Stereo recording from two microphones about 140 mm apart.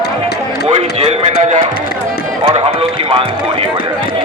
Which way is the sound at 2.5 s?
45° right (ahead or behind).